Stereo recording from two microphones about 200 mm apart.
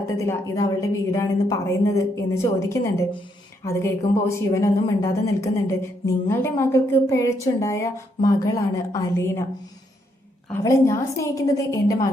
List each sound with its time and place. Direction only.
0.2 s speech: 15° left (ahead or behind)
10.5 s speech: 15° left (ahead or behind)